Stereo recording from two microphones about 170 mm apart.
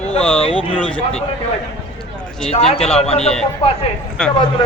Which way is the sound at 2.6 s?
35° left (ahead or behind).